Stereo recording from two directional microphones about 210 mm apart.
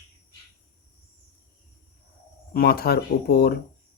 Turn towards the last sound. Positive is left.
turn(degrees=50)  # may be behind; listen again after turning